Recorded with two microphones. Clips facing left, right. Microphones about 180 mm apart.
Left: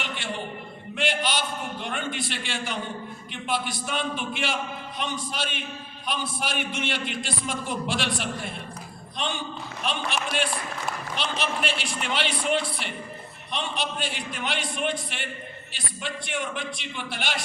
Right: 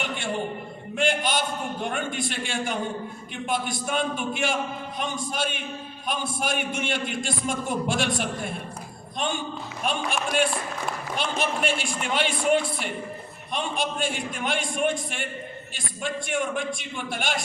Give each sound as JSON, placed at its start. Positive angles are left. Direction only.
{"t": 0.9, "sound": "a man's voice", "side_deg": -45}
{"t": 11.2, "sound": "a man's voice", "side_deg": -50}